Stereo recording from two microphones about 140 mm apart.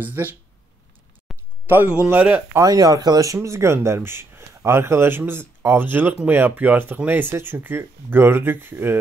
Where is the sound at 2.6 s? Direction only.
25° right (ahead or behind).